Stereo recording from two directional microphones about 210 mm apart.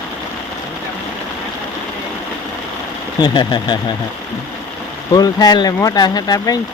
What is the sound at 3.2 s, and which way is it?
Speech, 20° left (ahead or behind).